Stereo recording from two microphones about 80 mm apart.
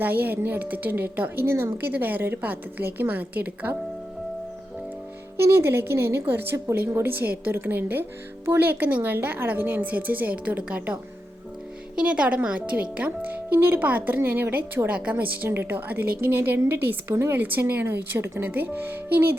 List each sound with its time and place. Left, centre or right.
0.0 s a woman's voice: right
5.4 s a woman's voice: right
7.1 s a woman's voice: right
11.9 s a woman's voice: centre
15.1 s a woman's voice: right